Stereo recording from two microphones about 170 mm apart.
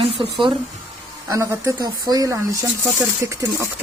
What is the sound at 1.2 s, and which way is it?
A woman's voice, 20° right (ahead or behind).